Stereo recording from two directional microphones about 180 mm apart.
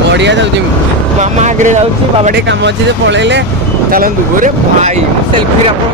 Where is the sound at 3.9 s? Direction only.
55° right (ahead or behind).